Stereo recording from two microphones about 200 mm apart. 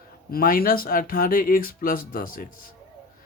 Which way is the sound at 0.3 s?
45° left (ahead or behind).